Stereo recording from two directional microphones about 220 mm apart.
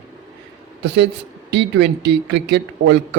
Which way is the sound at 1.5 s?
50° right (ahead or behind).